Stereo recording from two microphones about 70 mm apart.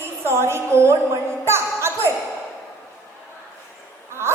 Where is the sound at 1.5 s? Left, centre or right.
Right.